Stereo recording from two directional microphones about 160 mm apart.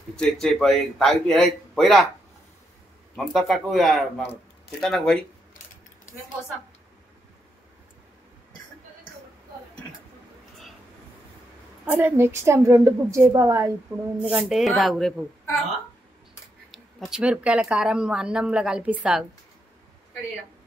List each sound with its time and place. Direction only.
0.1 s speech: 5° left (ahead or behind)
3.3 s speech: centre (ahead or behind)
11.8 s a woman's voice: 10° right (ahead or behind)
14.3 s speech: centre (ahead or behind)
16.7 s speech: centre (ahead or behind)